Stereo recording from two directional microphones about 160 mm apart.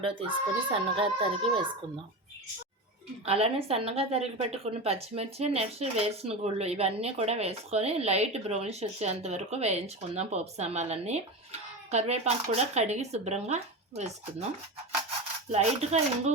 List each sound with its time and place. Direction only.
0.0 s a woman's voice: 30° right (ahead or behind)
3.2 s a woman's voice: 40° right (ahead or behind)
15.5 s speech: 45° right (ahead or behind)